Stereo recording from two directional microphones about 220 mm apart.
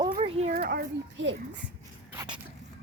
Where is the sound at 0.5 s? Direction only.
45° right (ahead or behind).